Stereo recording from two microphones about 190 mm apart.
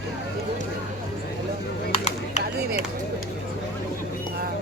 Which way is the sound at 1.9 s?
35° left (ahead or behind).